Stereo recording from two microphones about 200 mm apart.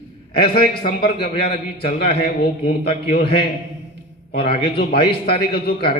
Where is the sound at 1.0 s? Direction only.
25° left (ahead or behind).